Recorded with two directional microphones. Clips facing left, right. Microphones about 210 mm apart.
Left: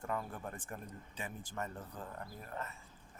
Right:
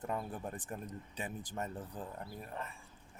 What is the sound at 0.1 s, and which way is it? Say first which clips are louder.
Speech: even; 20° right (ahead or behind).